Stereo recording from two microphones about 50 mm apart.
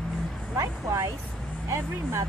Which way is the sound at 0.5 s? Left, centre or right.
Right.